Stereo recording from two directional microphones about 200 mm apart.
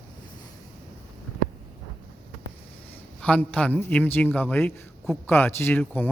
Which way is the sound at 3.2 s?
5° left (ahead or behind).